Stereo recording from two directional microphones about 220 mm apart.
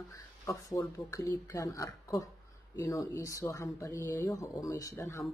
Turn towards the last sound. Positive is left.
turn(degrees=10)  # may be behind; listen again after turning